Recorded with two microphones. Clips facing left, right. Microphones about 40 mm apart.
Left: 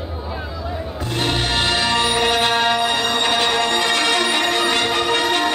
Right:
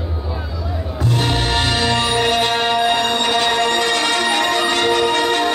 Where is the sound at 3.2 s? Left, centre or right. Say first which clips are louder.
Right 1 dB; centre.